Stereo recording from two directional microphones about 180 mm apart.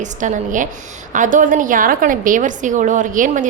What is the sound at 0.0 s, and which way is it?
A woman's voice, 45° right (ahead or behind).